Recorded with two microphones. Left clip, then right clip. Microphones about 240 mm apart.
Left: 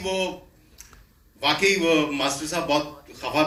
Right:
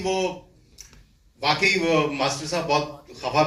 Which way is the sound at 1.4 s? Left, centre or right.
Left.